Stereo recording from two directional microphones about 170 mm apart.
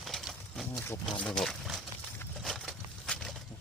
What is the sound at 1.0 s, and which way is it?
Speech, 5° left (ahead or behind).